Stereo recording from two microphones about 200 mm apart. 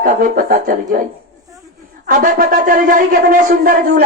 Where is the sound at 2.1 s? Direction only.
40° right (ahead or behind).